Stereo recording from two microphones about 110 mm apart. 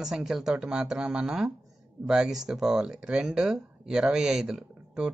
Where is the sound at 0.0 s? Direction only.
5° right (ahead or behind).